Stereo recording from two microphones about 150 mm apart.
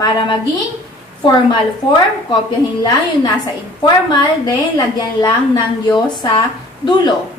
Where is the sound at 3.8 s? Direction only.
25° left (ahead or behind).